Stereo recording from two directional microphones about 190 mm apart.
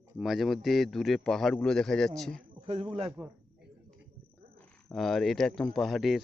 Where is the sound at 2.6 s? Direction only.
35° right (ahead or behind).